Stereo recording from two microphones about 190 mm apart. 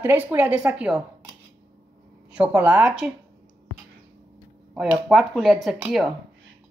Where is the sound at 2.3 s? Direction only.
5° right (ahead or behind).